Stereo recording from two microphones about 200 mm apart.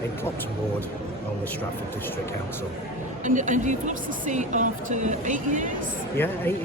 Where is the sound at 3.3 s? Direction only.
40° right (ahead or behind).